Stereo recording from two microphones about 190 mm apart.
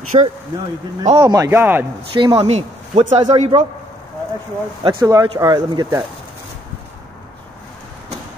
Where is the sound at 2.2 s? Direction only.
30° right (ahead or behind).